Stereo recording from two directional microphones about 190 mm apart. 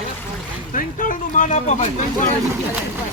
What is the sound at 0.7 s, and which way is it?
Speech, 45° left (ahead or behind).